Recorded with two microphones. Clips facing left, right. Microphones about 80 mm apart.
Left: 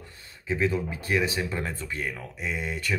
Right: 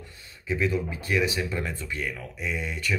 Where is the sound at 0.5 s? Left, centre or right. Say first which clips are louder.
Even; left.